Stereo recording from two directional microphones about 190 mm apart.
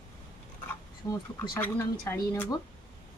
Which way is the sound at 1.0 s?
15° left (ahead or behind).